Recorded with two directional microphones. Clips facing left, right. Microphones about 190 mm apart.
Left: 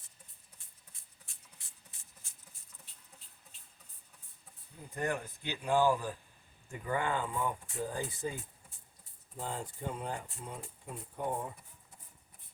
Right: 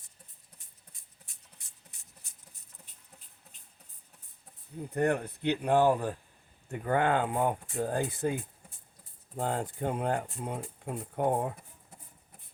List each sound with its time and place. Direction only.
4.9 s speech: 65° right (ahead or behind)